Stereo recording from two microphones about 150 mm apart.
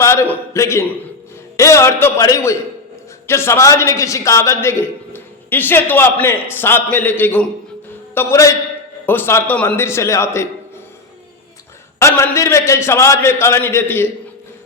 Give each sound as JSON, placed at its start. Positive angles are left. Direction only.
{"t": 0.0, "sound": "a man's voice", "side_deg": 15}
{"t": 11.9, "sound": "a man's voice", "side_deg": 20}